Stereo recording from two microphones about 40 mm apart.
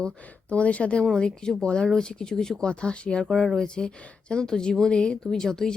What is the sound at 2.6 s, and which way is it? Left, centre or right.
Speech, left.